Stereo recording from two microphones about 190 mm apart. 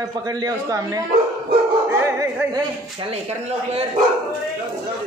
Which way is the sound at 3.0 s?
35° right (ahead or behind).